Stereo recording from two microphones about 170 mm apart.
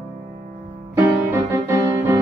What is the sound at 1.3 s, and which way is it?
Music, 15° right (ahead or behind).